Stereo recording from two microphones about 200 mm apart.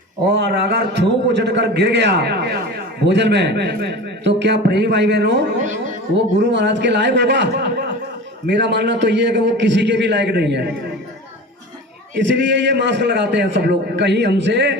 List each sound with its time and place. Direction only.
0.3 s a man's voice: 55° right (ahead or behind)
12.3 s a man's voice: 65° right (ahead or behind)